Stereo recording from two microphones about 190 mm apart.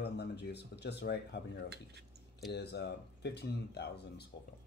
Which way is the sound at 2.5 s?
60° left (ahead or behind).